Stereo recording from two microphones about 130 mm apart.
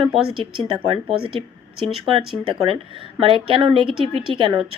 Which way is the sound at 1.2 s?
45° right (ahead or behind).